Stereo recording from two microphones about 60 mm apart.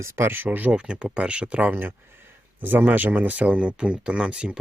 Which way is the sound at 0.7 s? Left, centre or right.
Centre.